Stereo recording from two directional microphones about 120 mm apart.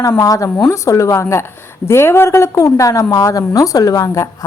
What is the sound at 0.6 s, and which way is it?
A woman's voice, 20° left (ahead or behind).